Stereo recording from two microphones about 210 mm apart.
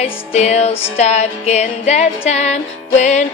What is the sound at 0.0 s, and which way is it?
Music, 30° left (ahead or behind).